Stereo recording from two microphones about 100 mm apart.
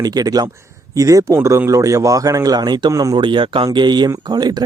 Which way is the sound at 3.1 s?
55° right (ahead or behind).